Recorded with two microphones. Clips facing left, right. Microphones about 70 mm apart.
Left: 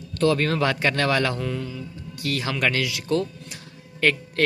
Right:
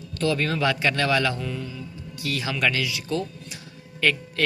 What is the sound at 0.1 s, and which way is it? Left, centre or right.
A man's voice, left.